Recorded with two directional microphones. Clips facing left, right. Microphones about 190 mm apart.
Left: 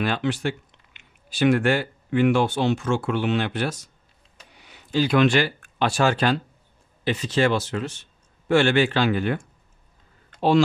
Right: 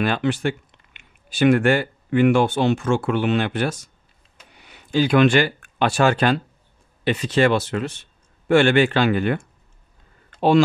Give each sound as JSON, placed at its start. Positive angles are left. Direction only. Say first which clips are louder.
{"t": 0.0, "sound": "speech", "louder": "right 3 dB", "side_deg": -55}